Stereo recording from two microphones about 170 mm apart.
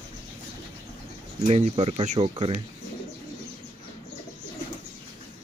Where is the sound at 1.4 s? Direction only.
35° right (ahead or behind).